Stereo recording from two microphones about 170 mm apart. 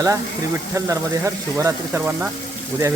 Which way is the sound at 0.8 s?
15° right (ahead or behind).